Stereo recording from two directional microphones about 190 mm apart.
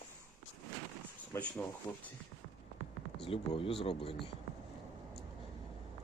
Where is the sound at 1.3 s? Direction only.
5° left (ahead or behind).